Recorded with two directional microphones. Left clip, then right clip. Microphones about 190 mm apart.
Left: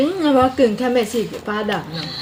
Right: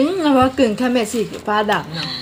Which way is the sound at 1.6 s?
35° right (ahead or behind).